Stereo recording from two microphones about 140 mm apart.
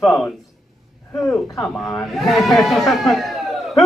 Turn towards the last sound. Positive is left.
turn(degrees=0)  # may be behind; listen again after turning